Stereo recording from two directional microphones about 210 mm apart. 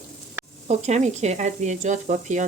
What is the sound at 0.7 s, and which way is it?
Speech, 35° right (ahead or behind).